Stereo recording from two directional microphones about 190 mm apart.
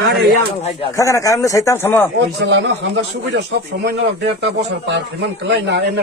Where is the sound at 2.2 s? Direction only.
65° right (ahead or behind).